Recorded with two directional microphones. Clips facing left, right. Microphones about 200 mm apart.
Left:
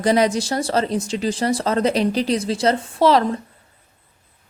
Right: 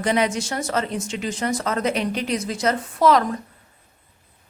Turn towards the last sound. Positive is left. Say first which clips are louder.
# left 2 dB
turn(degrees=30)  # may be behind; listen again after turning